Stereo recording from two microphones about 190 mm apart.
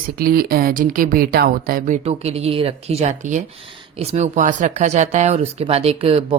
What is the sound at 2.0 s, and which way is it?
A woman's voice, 35° right (ahead or behind).